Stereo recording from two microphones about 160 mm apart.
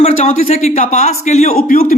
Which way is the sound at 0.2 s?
50° left (ahead or behind).